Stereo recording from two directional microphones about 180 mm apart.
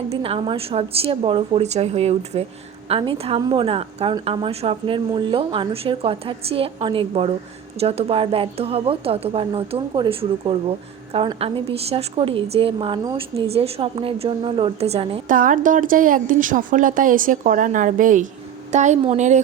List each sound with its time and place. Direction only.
0.1 s a woman's voice: 30° right (ahead or behind)
15.3 s a woman's voice: 45° right (ahead or behind)